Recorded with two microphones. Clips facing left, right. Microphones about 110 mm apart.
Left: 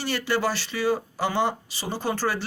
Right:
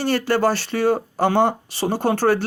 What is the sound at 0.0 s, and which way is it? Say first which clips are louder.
Speech: right 7 dB; 50° right (ahead or behind).